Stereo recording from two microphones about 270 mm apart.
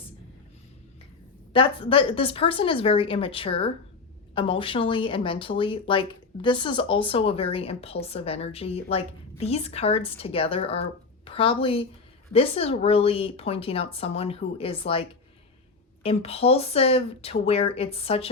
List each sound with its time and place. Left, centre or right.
1.5 s speech: centre
16.0 s speech: left